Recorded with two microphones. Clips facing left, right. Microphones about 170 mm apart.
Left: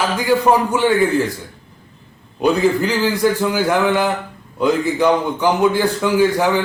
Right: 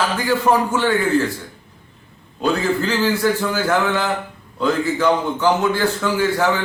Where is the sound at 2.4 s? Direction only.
15° left (ahead or behind).